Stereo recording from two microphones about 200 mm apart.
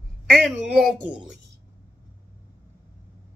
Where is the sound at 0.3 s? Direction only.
Centre (ahead or behind).